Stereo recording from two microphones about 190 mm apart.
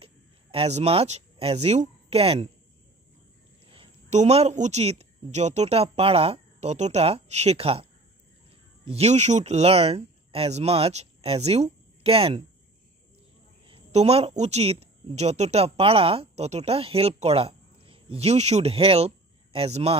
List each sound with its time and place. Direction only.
0.0 s speech: 30° right (ahead or behind)
3.7 s speech: 35° right (ahead or behind)
13.7 s speech: 30° right (ahead or behind)